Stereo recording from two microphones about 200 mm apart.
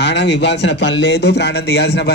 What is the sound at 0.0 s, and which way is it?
Speech, 60° left (ahead or behind).